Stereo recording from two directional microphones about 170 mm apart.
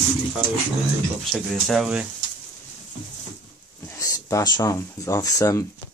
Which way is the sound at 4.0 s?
20° left (ahead or behind).